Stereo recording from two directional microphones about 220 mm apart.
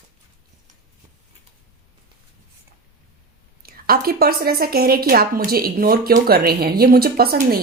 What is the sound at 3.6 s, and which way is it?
A woman's voice, 40° right (ahead or behind).